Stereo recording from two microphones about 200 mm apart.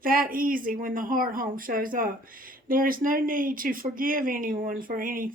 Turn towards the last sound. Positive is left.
turn(degrees=-45)  # may be behind; listen again after turning